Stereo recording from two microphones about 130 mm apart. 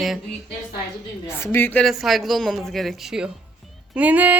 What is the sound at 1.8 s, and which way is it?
Speech, centre (ahead or behind).